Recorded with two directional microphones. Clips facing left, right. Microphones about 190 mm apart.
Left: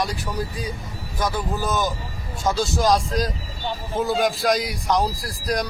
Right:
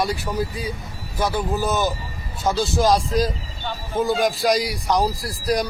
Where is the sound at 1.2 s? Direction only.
5° right (ahead or behind).